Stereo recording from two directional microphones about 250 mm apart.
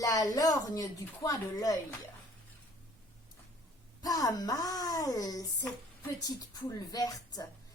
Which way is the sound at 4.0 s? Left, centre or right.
Centre.